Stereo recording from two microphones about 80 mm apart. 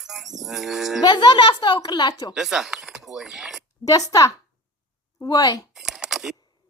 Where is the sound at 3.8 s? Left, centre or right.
Left.